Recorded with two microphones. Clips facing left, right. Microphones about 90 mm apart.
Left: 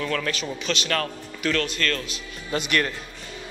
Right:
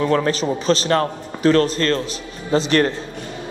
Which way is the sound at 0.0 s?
30° right (ahead or behind).